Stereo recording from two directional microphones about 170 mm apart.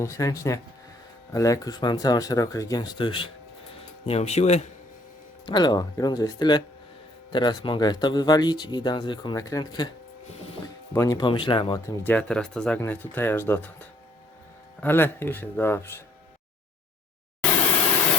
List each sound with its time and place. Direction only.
0.0 s speech: 20° left (ahead or behind); by 4.6 s 40° left (ahead or behind)
5.5 s speech: 25° left (ahead or behind)
10.9 s speech: 20° left (ahead or behind)
12.0 s speech: 5° left (ahead or behind)